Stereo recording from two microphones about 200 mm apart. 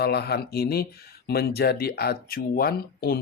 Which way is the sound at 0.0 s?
55° left (ahead or behind).